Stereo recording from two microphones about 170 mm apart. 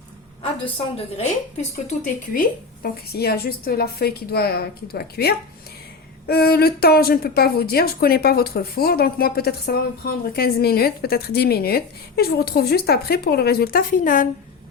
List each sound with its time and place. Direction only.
0.6 s a woman's voice: 35° left (ahead or behind)
1.9 s speech: 55° left (ahead or behind)
3.1 s a woman's voice: 65° left (ahead or behind)